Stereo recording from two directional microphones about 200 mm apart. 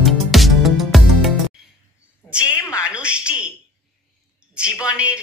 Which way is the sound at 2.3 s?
5° right (ahead or behind).